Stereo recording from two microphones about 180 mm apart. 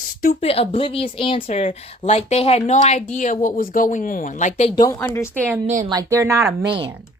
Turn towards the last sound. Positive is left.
turn(degrees=-25)  # may be behind; listen again after turning